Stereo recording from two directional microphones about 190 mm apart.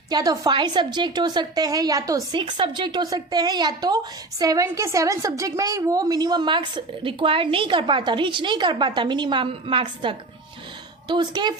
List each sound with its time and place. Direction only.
0.1 s a woman's voice: 20° right (ahead or behind)